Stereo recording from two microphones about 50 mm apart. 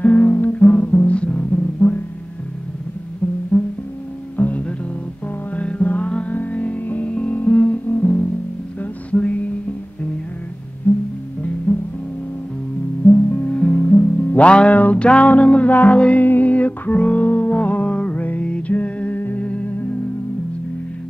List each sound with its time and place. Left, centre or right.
0.0 s music: left
3.5 s music: left
9.1 s music: left
10.9 s music: left
13.3 s music: left